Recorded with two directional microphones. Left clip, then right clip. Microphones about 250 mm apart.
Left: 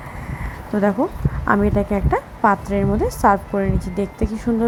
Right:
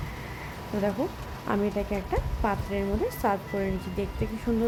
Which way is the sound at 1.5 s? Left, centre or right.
Centre.